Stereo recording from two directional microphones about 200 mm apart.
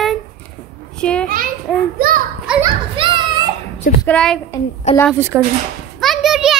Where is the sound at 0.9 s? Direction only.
5° left (ahead or behind).